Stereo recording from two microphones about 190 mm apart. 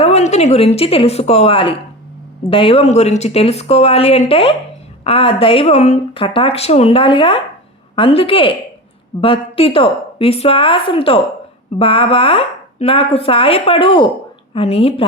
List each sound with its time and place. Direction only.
0.0 s speech: 35° left (ahead or behind)